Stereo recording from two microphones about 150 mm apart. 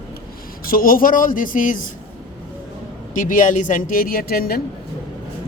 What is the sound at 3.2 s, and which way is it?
A woman's voice, 60° left (ahead or behind).